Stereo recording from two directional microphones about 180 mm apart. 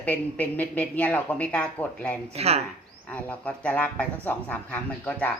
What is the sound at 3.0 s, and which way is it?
Speech, 5° left (ahead or behind).